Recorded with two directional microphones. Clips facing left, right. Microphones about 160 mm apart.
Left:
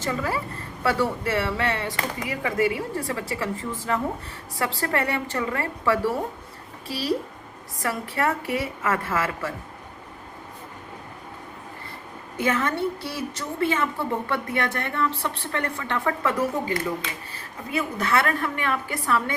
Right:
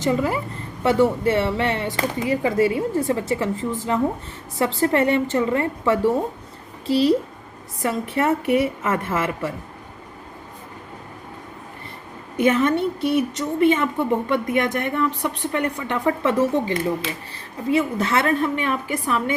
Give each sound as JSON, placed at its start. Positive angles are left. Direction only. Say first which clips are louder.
{"t": 0.0, "sound": "a woman's voice", "louder": "right 6 dB", "side_deg": -20}
{"t": 12.4, "sound": "a woman's voice", "louder": "right 6 dB", "side_deg": -20}